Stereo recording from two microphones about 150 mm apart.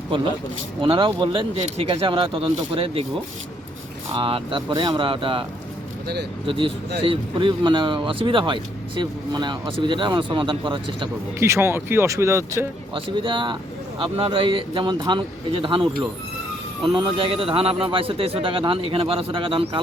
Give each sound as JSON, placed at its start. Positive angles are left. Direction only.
{"t": 0.8, "sound": "speech", "side_deg": -35}
{"t": 4.2, "sound": "speech", "side_deg": -35}
{"t": 11.3, "sound": "speech", "side_deg": -20}
{"t": 13.2, "sound": "speech", "side_deg": -35}